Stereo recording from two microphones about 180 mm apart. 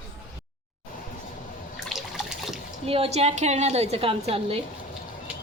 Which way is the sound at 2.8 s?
30° right (ahead or behind).